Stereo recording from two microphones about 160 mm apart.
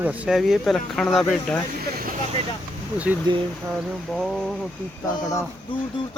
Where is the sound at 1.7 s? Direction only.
65° right (ahead or behind).